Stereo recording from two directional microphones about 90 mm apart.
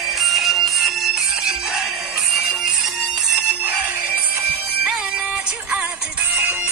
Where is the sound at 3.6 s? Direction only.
20° right (ahead or behind).